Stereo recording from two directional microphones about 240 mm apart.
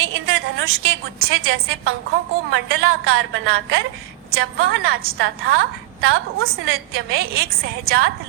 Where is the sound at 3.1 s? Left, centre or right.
Right.